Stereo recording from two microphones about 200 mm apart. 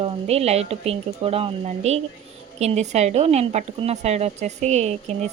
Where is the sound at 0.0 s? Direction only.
30° right (ahead or behind).